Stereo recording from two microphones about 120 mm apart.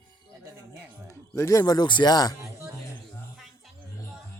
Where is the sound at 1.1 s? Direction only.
25° left (ahead or behind).